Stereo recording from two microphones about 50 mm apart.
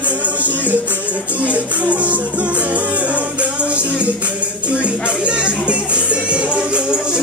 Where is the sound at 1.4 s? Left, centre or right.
Right.